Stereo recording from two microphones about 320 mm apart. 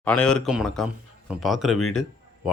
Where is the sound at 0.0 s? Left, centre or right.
Centre.